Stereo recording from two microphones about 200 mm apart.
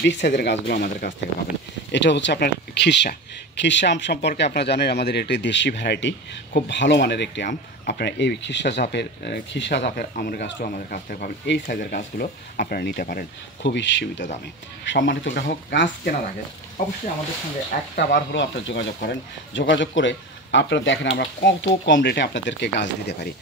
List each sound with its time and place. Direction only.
0.0 s speech: 60° left (ahead or behind)
11.6 s speech: 45° left (ahead or behind); by 16.2 s 65° left (ahead or behind)
17.9 s speech: 60° left (ahead or behind)